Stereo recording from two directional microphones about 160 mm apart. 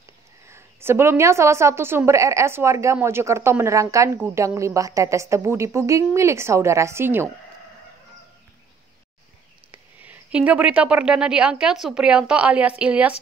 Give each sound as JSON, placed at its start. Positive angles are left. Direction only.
{"t": 0.5, "sound": "a woman's voice", "side_deg": -15}
{"t": 9.7, "sound": "speech", "side_deg": -10}